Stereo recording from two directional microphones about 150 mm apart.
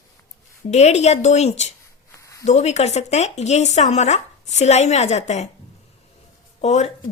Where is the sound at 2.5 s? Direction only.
45° left (ahead or behind).